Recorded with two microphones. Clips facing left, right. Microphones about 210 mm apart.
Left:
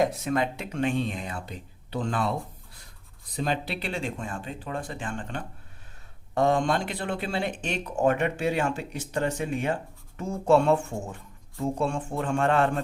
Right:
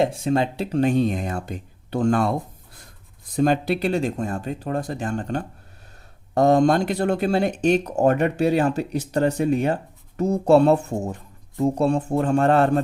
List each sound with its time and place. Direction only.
0.0 s speech: 30° right (ahead or behind); by 2.3 s 45° right (ahead or behind)
3.3 s speech: 45° right (ahead or behind)